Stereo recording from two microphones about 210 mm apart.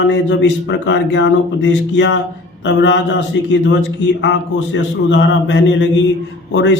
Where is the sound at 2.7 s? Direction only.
60° left (ahead or behind).